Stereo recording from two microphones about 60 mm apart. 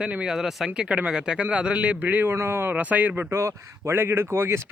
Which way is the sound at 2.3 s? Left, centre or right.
Right.